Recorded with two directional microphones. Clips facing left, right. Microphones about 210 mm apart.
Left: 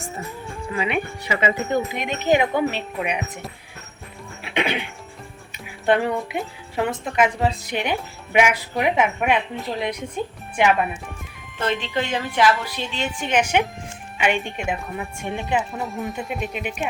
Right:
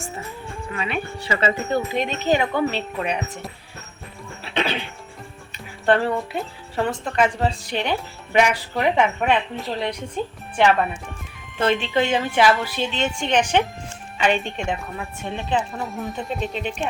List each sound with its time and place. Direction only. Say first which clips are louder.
0.7 s speech: left 3 dB; 20° left (ahead or behind)
4.4 s music: left 1 dB; 15° left (ahead or behind)
5.8 s speech: even; 15° left (ahead or behind)
11.9 s a woman's voice: right 2 dB; 25° right (ahead or behind)
12.6 s speech: right 4 dB; centre (ahead or behind)
15.7 s speech: left 1 dB; centre (ahead or behind)
16.4 s speech: right 2 dB; 10° left (ahead or behind)